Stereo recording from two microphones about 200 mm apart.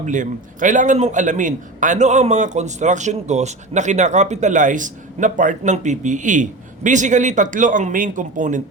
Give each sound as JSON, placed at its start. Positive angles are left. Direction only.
{"t": 0.0, "sound": "a man's voice", "side_deg": -40}